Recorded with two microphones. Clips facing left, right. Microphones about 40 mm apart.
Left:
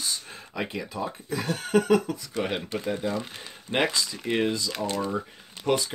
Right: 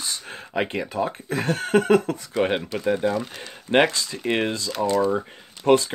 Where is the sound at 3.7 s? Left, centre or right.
Right.